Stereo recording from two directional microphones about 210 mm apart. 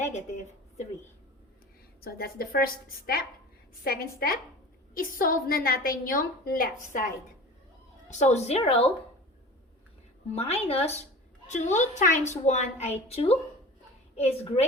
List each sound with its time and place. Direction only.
0.0 s a woman's voice: 35° left (ahead or behind)
2.0 s a woman's voice: 45° left (ahead or behind)
8.2 s a woman's voice: 30° left (ahead or behind)
10.3 s a woman's voice: 30° left (ahead or behind)